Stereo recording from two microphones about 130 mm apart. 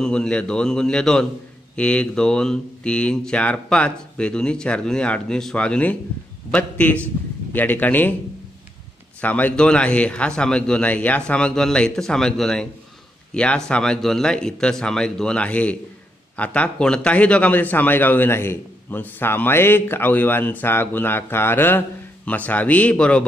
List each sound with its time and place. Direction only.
0.0 s a man's voice: 5° left (ahead or behind)
9.2 s a man's voice: 10° left (ahead or behind)